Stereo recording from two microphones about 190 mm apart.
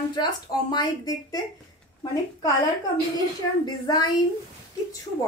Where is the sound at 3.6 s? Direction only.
20° left (ahead or behind).